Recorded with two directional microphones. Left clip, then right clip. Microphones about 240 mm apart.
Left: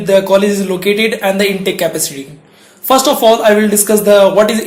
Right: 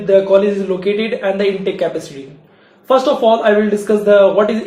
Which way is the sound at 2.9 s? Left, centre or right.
Left.